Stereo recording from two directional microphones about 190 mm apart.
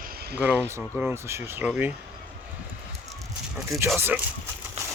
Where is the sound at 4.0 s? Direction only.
10° right (ahead or behind).